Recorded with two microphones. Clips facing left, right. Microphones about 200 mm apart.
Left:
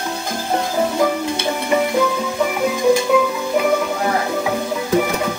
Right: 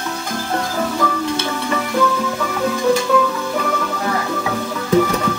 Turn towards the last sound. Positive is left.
turn(degrees=15)  # may be behind; listen again after turning